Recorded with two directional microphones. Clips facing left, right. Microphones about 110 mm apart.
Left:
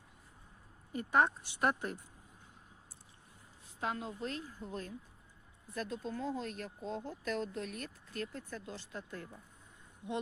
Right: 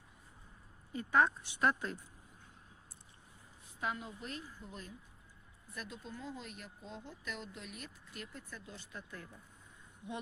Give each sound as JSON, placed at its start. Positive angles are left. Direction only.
{"t": 1.1, "sound": "a woman's voice", "side_deg": 25}
{"t": 3.8, "sound": "a woman's voice", "side_deg": 35}